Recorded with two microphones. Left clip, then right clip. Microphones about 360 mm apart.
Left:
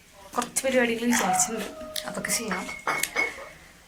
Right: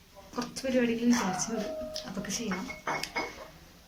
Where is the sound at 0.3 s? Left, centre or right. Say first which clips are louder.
Left 6 dB; centre.